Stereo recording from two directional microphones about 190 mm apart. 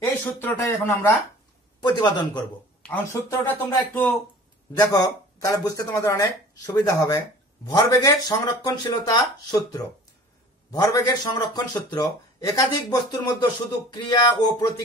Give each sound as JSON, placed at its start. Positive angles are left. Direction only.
{"t": 0.4, "sound": "a man's voice", "side_deg": 10}
{"t": 2.8, "sound": "a man's voice", "side_deg": 10}